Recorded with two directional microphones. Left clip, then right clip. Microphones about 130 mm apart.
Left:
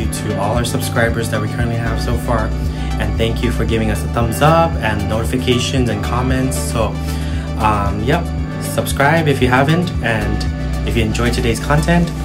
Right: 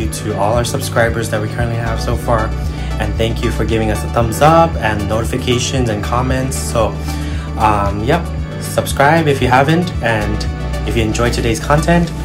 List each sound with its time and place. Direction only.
0.6 s speech: centre (ahead or behind)
3.2 s speech: 5° left (ahead or behind)